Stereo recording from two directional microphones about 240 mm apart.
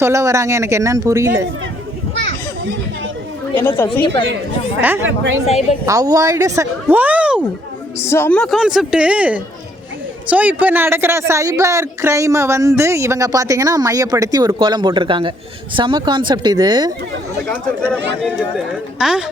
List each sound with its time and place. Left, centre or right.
0.0 s a man's voice: centre
3.5 s a woman's voice: centre
4.0 s speech: left
5.0 s speech: right
5.8 s a man's voice: centre
7.9 s a woman's voice: centre
17.8 s a woman's voice: centre